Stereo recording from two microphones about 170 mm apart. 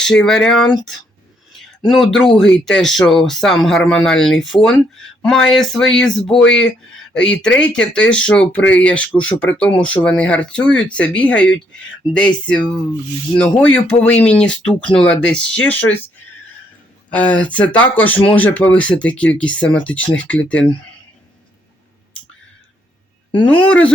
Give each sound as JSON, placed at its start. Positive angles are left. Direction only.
{"t": 0.0, "sound": "speech", "side_deg": 5}
{"t": 6.4, "sound": "speech", "side_deg": 90}
{"t": 6.7, "sound": "speech", "side_deg": 5}
{"t": 17.1, "sound": "speech", "side_deg": 10}
{"t": 23.5, "sound": "speech", "side_deg": 10}